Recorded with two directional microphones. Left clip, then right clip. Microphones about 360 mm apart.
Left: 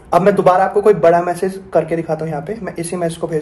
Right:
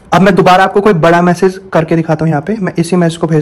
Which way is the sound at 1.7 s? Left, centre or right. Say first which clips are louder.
Right 5 dB; right.